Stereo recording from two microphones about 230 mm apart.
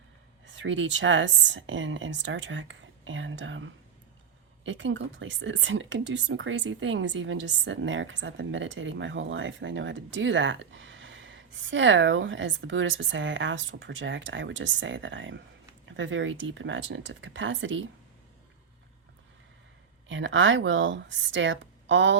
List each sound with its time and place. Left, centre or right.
0.4 s speech: right
20.1 s speech: right